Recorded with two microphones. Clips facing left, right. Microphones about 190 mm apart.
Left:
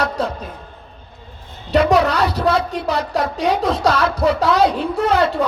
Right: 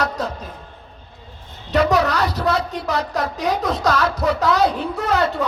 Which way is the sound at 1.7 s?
30° left (ahead or behind).